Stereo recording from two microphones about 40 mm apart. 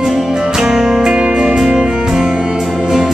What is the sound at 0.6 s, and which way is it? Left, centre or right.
Music, centre.